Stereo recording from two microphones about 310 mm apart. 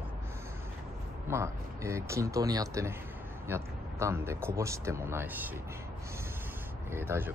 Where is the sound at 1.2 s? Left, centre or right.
Centre.